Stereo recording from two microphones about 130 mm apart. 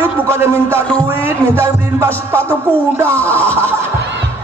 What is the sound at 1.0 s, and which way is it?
Speech, 45° left (ahead or behind).